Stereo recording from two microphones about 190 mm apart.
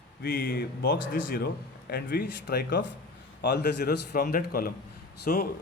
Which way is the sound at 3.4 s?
60° left (ahead or behind).